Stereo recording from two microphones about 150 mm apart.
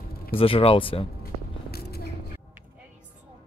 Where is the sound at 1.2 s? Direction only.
90° left.